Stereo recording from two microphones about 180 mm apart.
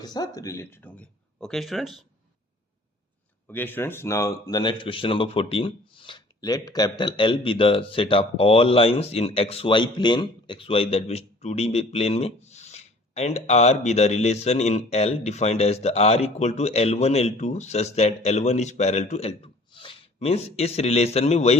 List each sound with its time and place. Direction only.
0.0 s speech: 20° left (ahead or behind); by 2.0 s centre (ahead or behind)
3.4 s speech: 10° left (ahead or behind); by 21.6 s 35° left (ahead or behind)